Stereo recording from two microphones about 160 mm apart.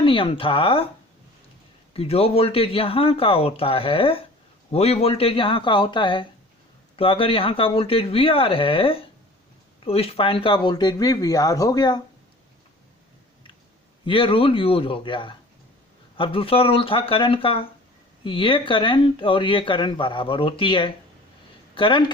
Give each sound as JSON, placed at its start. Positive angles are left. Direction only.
{"t": 0.0, "sound": "speech", "side_deg": 35}
{"t": 1.9, "sound": "speech", "side_deg": 40}
{"t": 14.0, "sound": "a woman's voice", "side_deg": 35}